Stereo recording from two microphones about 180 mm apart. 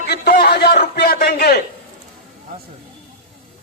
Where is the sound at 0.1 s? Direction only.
65° left (ahead or behind).